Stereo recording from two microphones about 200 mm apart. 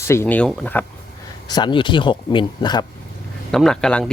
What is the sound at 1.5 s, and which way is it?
Speech, 20° left (ahead or behind).